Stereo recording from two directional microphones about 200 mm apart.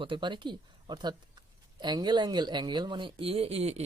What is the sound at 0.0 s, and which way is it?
Speech, 25° right (ahead or behind).